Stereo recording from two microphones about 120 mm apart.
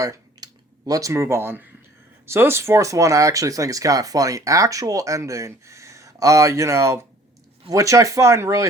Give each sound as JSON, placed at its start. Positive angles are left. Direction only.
{"t": 0.0, "sound": "speech", "side_deg": -30}